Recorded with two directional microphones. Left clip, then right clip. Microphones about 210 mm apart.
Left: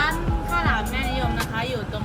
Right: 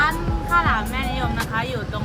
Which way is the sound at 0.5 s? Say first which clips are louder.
Right 4 dB; centre (ahead or behind).